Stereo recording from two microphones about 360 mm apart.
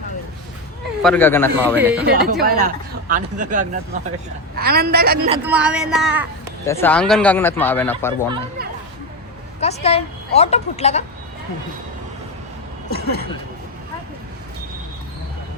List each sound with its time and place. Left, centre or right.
1.0 s speech: centre
2.0 s speech: right
5.3 s speech: centre
9.6 s a woman's voice: centre
12.9 s speech: left